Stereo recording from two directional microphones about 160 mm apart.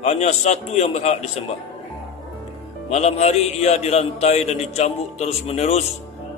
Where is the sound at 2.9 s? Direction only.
40° left (ahead or behind).